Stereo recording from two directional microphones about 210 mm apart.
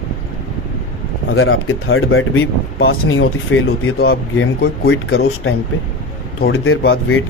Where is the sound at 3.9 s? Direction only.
50° left (ahead or behind); by 5.5 s 65° left (ahead or behind).